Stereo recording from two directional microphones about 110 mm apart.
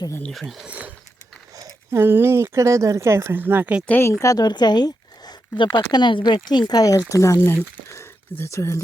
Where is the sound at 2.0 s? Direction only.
20° right (ahead or behind).